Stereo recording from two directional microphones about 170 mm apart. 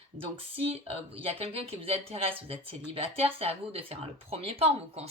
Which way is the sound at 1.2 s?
35° right (ahead or behind).